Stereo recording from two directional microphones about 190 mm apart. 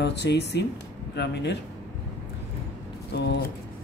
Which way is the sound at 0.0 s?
60° left (ahead or behind).